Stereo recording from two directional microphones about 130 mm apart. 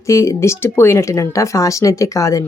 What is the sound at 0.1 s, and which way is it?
Speech, 25° left (ahead or behind).